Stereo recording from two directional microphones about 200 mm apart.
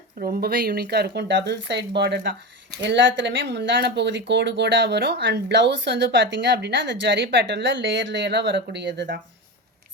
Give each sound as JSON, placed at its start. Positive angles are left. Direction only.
{"t": 0.2, "sound": "speech", "side_deg": -50}